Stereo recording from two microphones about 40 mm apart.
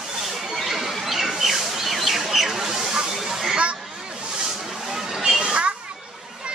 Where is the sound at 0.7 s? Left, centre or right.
Centre.